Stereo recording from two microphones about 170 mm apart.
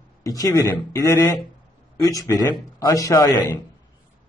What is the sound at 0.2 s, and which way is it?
A man's voice, 20° left (ahead or behind).